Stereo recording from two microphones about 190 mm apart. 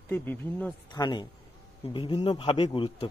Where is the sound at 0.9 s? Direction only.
25° left (ahead or behind).